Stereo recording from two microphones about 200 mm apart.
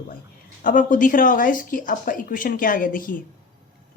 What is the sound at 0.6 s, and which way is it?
Speech, 40° left (ahead or behind).